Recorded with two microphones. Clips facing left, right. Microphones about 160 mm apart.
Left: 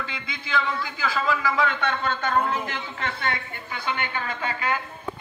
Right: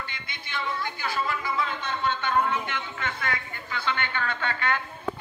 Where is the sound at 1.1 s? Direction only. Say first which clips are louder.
Left 5 dB; 90° left; by 2.1 s 65° left (ahead or behind).